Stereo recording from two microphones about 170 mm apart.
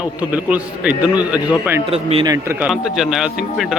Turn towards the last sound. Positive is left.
turn(degrees=-5)  # may be behind; listen again after turning